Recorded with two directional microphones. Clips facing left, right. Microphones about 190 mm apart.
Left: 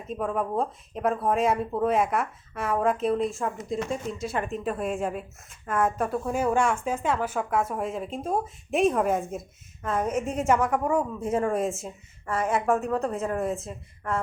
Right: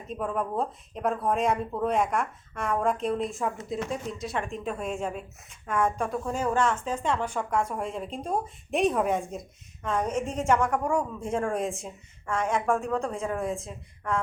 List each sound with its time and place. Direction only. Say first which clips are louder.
0.1 s speech: left 2 dB; centre (ahead or behind)